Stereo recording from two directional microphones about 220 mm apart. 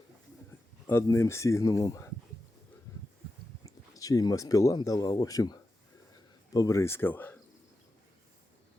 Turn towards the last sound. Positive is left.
turn(degrees=10)  # may be behind; listen again after turning